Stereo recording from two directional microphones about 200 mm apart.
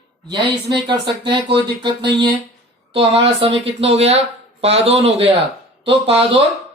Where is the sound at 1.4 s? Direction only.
55° right (ahead or behind).